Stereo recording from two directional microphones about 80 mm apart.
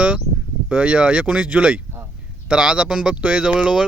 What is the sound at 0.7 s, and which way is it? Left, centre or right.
Speech, centre.